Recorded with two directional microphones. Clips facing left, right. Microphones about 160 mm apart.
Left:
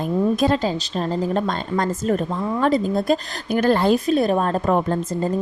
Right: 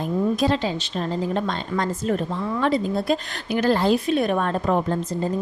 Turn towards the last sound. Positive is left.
turn(degrees=45)  # may be behind; listen again after turning